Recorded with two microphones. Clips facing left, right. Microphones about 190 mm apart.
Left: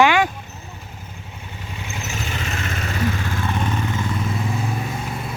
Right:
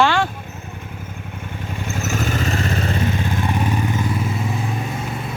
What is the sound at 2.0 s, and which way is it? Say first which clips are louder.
Vehicle: right 8 dB; 45° right (ahead or behind).